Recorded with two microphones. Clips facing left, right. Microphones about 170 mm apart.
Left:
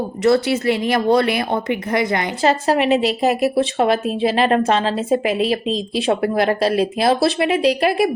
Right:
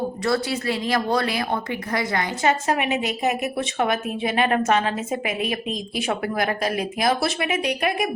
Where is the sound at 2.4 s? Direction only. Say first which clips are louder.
Left 6 dB; 30° left (ahead or behind).